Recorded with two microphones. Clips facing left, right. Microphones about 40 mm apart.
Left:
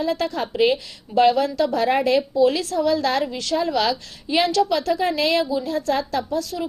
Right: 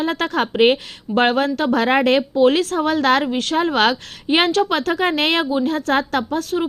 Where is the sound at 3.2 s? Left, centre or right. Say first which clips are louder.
Right 4 dB; right.